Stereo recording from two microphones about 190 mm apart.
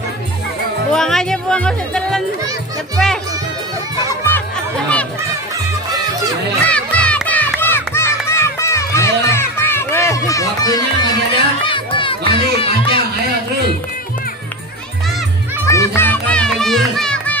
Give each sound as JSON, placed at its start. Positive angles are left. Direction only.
{"t": 0.9, "sound": "music", "side_deg": 5}
{"t": 4.3, "sound": "music", "side_deg": 5}
{"t": 6.7, "sound": "music", "side_deg": 5}
{"t": 15.6, "sound": "music", "side_deg": 15}